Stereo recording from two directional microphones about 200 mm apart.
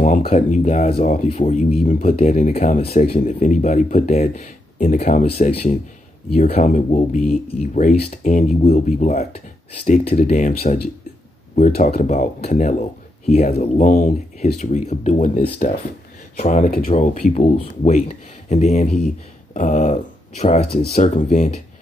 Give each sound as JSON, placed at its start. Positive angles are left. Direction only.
{"t": 0.0, "sound": "speech", "side_deg": 40}
{"t": 11.5, "sound": "speech", "side_deg": 35}